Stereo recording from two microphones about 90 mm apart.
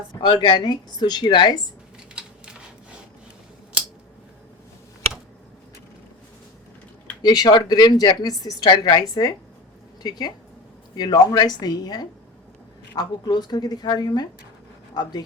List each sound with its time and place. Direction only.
0.2 s speech: 55° left (ahead or behind)
2.1 s a sound: 10° right (ahead or behind)
7.2 s speech: 50° left (ahead or behind)